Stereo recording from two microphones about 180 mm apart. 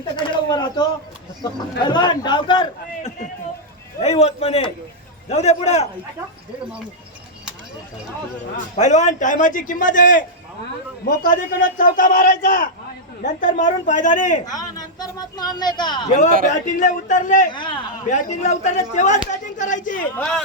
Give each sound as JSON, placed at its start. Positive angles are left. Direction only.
{"t": 0.2, "sound": "pigeon", "side_deg": 25}
{"t": 1.8, "sound": "a man's voice", "side_deg": 25}
{"t": 4.0, "sound": "a man's voice", "side_deg": 35}
{"t": 8.7, "sound": "a man's voice", "side_deg": 40}
{"t": 14.4, "sound": "a woman's voice", "side_deg": 20}
{"t": 16.5, "sound": "a man's voice", "side_deg": 45}
{"t": 17.5, "sound": "a man's voice", "side_deg": 25}
{"t": 18.1, "sound": "a man's voice", "side_deg": 40}
{"t": 19.3, "sound": "a sound", "side_deg": 45}
{"t": 20.1, "sound": "speech", "side_deg": 5}